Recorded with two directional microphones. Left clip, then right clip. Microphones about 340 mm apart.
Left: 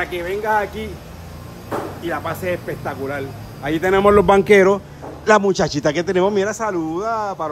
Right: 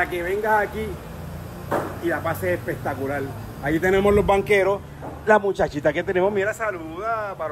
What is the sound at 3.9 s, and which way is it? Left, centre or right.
Speech, left.